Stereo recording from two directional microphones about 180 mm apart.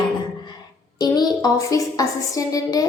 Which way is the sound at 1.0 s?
20° left (ahead or behind).